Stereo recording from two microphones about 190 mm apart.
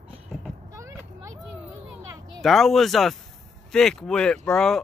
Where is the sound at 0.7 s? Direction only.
15° right (ahead or behind).